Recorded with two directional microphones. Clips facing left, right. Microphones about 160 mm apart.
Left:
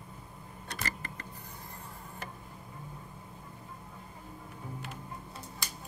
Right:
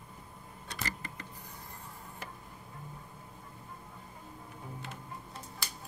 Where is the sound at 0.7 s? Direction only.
55° left (ahead or behind).